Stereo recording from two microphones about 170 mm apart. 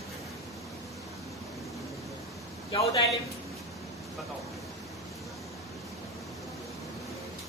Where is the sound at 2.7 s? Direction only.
35° left (ahead or behind).